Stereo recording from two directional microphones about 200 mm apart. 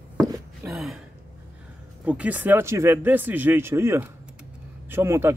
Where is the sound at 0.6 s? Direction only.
Centre (ahead or behind).